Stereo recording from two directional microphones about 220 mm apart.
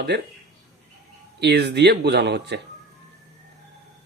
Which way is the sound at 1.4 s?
50° right (ahead or behind).